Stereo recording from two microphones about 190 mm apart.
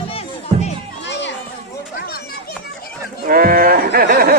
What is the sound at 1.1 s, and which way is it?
Children playing, 70° left (ahead or behind).